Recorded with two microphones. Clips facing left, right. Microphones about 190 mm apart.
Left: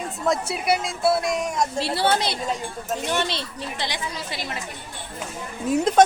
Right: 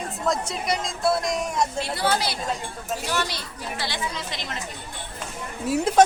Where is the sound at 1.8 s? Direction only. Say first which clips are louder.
Left 3 dB; 30° left (ahead or behind).